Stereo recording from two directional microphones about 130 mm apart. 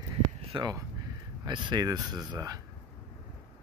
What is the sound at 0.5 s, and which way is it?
Speech, 40° right (ahead or behind).